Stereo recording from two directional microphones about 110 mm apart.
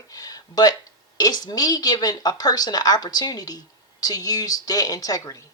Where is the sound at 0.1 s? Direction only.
35° left (ahead or behind).